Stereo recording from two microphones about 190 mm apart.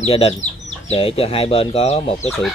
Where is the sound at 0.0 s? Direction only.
30° left (ahead or behind).